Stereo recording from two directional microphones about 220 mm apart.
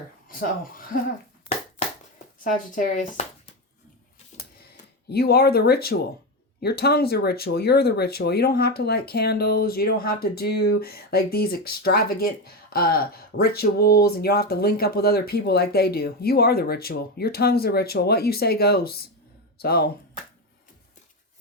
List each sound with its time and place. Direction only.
0.3 s speech: 40° left (ahead or behind)
2.1 s speech: 35° left (ahead or behind)
5.0 s speech: 45° left (ahead or behind)